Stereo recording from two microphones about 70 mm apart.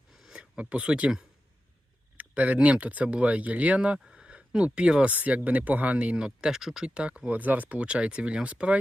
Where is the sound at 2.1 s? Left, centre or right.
Centre.